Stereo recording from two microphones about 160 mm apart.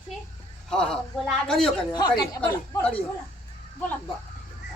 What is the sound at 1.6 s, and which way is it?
Speech, 25° left (ahead or behind).